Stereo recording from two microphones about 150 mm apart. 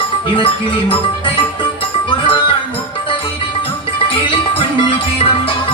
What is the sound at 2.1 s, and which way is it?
Music, 35° left (ahead or behind).